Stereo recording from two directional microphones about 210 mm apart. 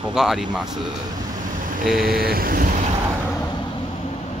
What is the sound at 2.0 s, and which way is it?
Vehicle, 45° right (ahead or behind).